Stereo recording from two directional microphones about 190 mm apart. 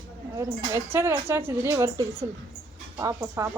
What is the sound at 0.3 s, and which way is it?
A woman's voice, 15° right (ahead or behind).